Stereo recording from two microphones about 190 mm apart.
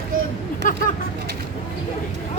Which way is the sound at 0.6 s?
45° left (ahead or behind).